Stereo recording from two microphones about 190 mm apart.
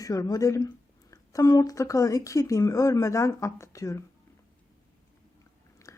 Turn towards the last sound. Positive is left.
turn(degrees=15)  # may be behind; listen again after turning